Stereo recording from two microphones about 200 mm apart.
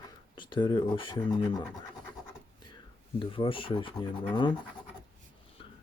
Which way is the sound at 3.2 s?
25° left (ahead or behind).